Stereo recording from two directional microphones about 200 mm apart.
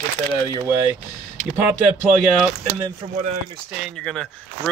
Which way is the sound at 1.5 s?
10° right (ahead or behind).